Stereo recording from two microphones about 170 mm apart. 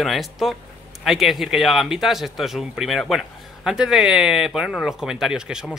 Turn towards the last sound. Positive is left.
turn(degrees=-5)  # may be behind; listen again after turning